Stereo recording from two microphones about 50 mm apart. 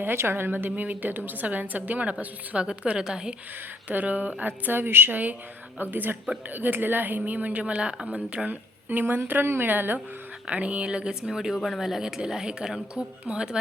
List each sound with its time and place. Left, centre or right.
0.2 s a woman's voice: right; by 3.3 s centre
3.8 s a woman's voice: right
7.6 s speech: right
8.4 s a woman's voice: right
10.4 s speech: right